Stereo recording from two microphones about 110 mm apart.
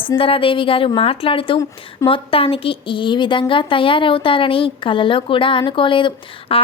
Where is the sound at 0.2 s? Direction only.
55° left (ahead or behind).